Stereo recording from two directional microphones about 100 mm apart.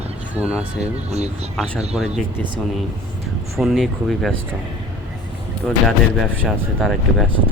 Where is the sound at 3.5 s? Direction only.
Centre (ahead or behind).